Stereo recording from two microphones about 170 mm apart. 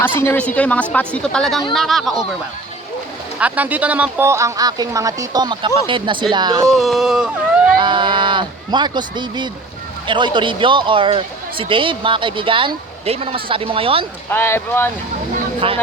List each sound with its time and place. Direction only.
0.0 s a woman's voice: 15° left (ahead or behind)
3.3 s speech: 10° right (ahead or behind); by 6.7 s 25° right (ahead or behind)
6.7 s speech: centre (ahead or behind)
7.8 s a man's voice: 30° right (ahead or behind)
14.3 s a woman's voice: 15° left (ahead or behind)
15.6 s speech: 35° right (ahead or behind)